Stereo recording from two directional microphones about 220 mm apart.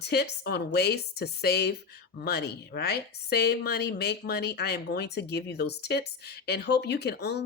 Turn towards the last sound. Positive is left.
turn(degrees=50)  # may be behind; listen again after turning